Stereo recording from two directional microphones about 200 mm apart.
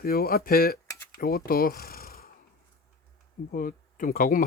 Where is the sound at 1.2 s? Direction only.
50° left (ahead or behind).